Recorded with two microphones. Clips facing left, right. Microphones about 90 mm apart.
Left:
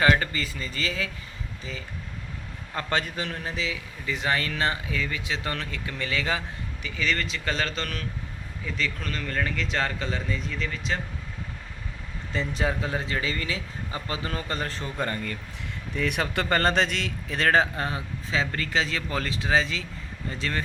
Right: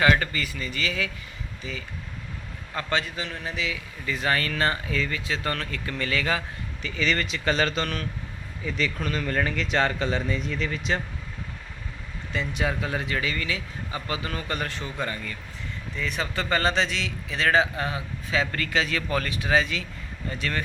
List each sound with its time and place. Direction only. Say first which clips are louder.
0.0 s a man's voice: even; 25° left (ahead or behind)
2.9 s speech: even; 50° left (ahead or behind)
3.4 s a man's voice: even; 30° left (ahead or behind)
4.0 s speech: right 1 dB; 20° left (ahead or behind)
6.8 s speech: right 2 dB; 5° left (ahead or behind)
12.3 s a man's voice: even; 35° left (ahead or behind); by 15.4 s 50° left (ahead or behind)
16.0 s speech: left 3 dB; 60° left (ahead or behind)
18.3 s speech: right 1 dB; 25° left (ahead or behind)